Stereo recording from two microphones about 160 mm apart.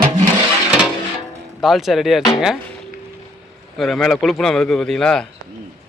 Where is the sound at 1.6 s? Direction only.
Centre (ahead or behind).